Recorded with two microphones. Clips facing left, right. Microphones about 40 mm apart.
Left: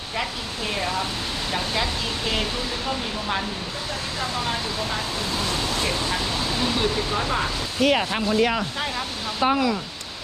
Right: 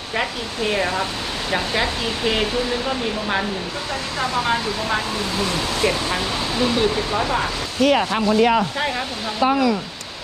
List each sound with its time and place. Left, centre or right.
0.7 s speech: right
4.2 s speech: right
7.8 s speech: centre
8.1 s speech: centre